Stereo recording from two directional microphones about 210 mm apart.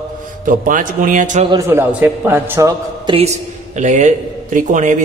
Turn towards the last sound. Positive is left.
turn(degrees=-35)  # may be behind; listen again after turning